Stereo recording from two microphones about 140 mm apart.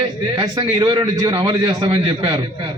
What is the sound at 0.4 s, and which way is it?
A man's voice, 30° right (ahead or behind).